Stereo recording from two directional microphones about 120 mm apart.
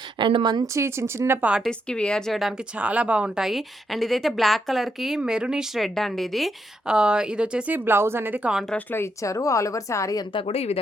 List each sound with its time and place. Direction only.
0.2 s a woman's voice: 45° right (ahead or behind); by 1.6 s 10° right (ahead or behind)
1.6 s speech: 5° left (ahead or behind); by 8.5 s 15° right (ahead or behind)
8.7 s a woman's voice: 20° left (ahead or behind)
10.3 s speech: 55° left (ahead or behind)